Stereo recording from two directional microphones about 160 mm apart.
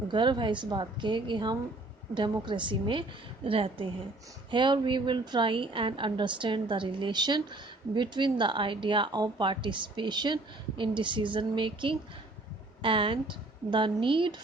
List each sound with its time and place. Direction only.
0.1 s a woman's voice: 30° right (ahead or behind)